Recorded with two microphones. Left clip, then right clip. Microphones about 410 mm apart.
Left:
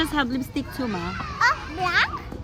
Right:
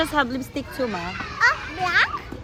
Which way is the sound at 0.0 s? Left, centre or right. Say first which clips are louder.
Right 2 dB; centre.